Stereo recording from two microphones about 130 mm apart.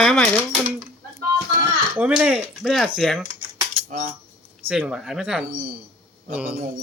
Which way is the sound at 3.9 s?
90° right.